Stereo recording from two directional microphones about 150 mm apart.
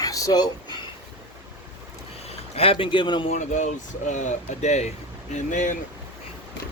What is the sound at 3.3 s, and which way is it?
Speech, 55° left (ahead or behind).